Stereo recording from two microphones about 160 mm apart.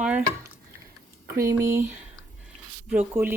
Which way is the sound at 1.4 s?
15° right (ahead or behind).